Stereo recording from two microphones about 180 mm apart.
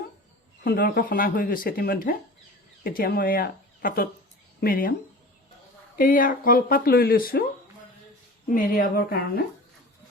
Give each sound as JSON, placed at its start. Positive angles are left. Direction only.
{"t": 0.6, "sound": "speech", "side_deg": 55}
{"t": 6.0, "sound": "speech", "side_deg": 50}
{"t": 8.4, "sound": "speech", "side_deg": 50}